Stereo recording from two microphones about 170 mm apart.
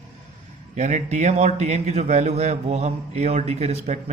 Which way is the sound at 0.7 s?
40° right (ahead or behind).